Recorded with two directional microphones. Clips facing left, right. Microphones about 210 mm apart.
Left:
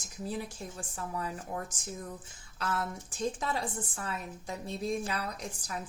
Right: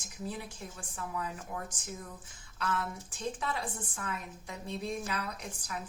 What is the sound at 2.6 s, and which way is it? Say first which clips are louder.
A woman's voice: left 1 dB; 40° left (ahead or behind).